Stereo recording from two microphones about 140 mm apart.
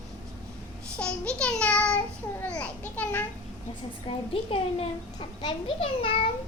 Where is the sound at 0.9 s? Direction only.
5° left (ahead or behind).